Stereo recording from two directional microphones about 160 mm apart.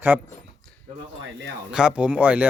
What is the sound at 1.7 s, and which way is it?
Speech, 5° right (ahead or behind).